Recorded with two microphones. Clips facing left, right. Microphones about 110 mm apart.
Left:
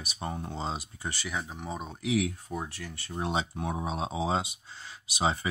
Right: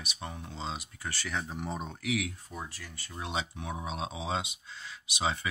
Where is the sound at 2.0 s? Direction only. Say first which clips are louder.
Left 6 dB; 30° left (ahead or behind).